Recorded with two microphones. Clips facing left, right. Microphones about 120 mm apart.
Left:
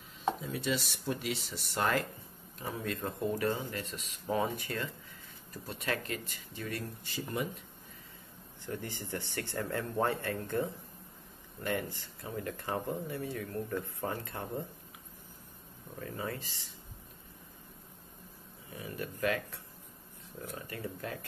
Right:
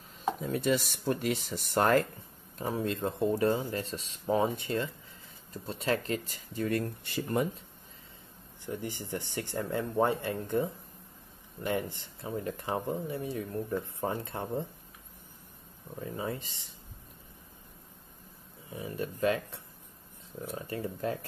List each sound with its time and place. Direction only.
0.4 s speech: 50° right (ahead or behind)
2.6 s speech: 30° right (ahead or behind); by 7.4 s 50° right (ahead or behind)
8.6 s speech: 15° right (ahead or behind)
16.0 s speech: 20° right (ahead or behind)
18.7 s speech: 25° right (ahead or behind)